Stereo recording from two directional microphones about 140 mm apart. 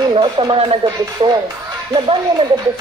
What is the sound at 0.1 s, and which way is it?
Speech, 35° right (ahead or behind).